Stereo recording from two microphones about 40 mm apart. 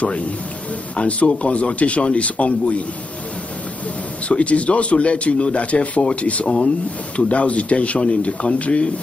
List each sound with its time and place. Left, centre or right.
0.9 s speech: left
4.3 s speech: left